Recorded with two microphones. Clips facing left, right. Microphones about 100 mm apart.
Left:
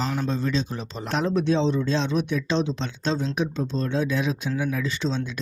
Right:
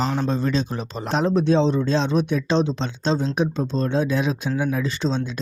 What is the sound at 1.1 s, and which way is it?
Speech, 30° right (ahead or behind).